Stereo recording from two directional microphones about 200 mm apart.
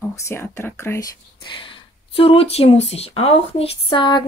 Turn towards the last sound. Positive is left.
turn(degrees=25)  # may be behind; listen again after turning